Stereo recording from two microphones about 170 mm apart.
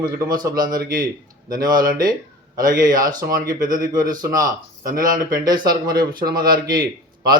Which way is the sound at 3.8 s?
20° right (ahead or behind).